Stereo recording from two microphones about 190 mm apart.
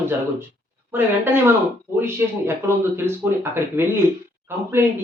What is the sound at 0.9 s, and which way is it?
Speech, 10° right (ahead or behind).